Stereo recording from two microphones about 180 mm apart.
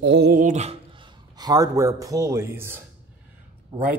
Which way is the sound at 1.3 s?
20° right (ahead or behind).